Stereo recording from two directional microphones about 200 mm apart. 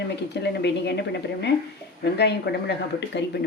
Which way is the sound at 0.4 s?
55° left (ahead or behind).